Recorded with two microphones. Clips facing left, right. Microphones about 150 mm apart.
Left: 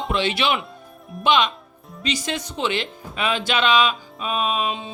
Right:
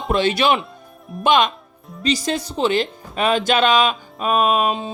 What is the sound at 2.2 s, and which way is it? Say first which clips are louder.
Speech: right 5 dB; 35° right (ahead or behind).